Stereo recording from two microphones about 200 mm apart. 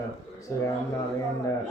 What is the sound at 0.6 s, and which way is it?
Speech, 15° left (ahead or behind).